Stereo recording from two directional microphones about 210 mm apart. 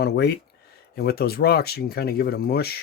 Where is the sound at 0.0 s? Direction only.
50° left (ahead or behind).